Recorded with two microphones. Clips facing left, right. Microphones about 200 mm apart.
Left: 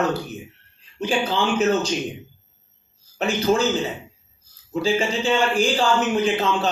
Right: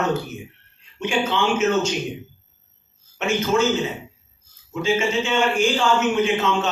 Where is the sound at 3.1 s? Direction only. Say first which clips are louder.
Even; 35° left (ahead or behind).